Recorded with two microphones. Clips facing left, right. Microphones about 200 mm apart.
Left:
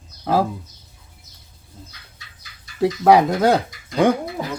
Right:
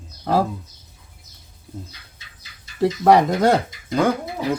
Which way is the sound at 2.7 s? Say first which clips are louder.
Left 1 dB; centre (ahead or behind).